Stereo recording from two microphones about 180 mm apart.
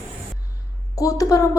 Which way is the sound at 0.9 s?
20° left (ahead or behind).